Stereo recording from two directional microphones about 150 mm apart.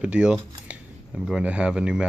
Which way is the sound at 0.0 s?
5° right (ahead or behind).